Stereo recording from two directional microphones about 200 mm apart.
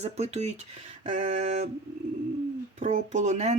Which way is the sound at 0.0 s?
35° right (ahead or behind).